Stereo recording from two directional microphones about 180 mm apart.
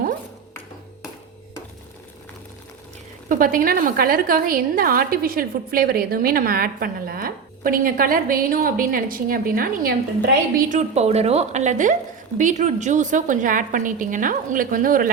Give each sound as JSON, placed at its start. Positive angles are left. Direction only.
{"t": 3.2, "sound": "a woman's voice", "side_deg": -50}